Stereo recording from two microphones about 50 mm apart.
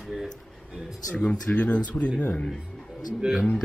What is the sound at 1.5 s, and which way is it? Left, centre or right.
Speech, left.